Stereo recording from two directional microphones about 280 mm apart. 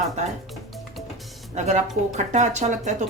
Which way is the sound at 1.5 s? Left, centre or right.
Right.